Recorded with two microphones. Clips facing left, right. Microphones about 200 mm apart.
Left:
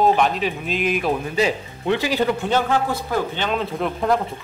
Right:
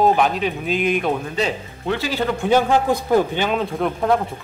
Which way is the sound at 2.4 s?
15° right (ahead or behind).